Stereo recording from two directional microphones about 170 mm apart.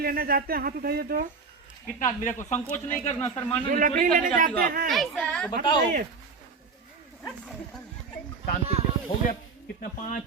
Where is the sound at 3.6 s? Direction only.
55° right (ahead or behind).